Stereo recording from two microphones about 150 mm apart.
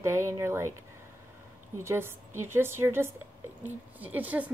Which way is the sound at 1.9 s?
15° right (ahead or behind).